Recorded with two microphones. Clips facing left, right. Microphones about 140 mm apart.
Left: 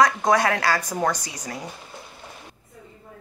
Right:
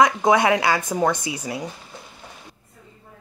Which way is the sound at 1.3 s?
5° right (ahead or behind).